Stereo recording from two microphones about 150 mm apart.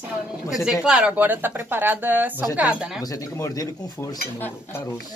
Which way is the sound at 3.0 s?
25° left (ahead or behind).